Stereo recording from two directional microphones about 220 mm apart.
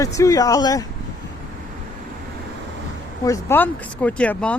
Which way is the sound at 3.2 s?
10° left (ahead or behind).